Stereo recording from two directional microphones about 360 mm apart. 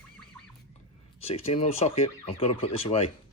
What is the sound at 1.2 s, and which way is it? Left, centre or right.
Speech, centre.